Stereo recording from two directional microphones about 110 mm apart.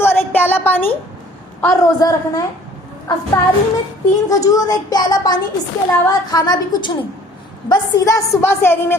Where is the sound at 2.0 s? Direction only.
35° left (ahead or behind).